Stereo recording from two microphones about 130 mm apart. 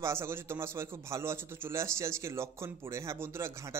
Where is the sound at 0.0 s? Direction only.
20° right (ahead or behind).